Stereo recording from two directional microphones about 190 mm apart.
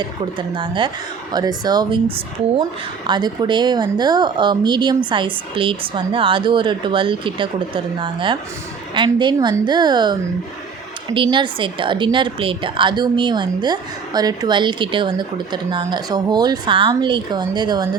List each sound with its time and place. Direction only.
0.0 s a woman's voice: 25° right (ahead or behind)